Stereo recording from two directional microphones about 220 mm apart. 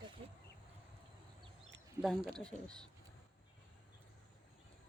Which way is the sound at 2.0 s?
Centre (ahead or behind).